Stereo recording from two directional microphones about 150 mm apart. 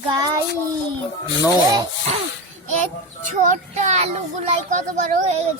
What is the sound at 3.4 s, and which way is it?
Speech, 50° right (ahead or behind).